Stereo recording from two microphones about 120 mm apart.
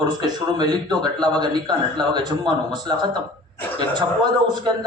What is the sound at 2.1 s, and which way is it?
Speech, 35° right (ahead or behind).